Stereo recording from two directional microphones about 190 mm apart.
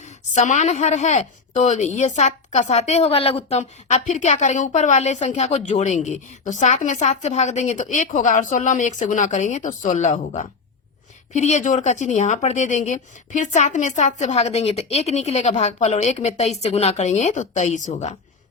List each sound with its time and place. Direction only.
0.3 s speech: 40° left (ahead or behind)